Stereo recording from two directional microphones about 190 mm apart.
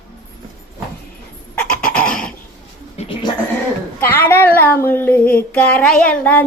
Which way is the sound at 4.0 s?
10° left (ahead or behind).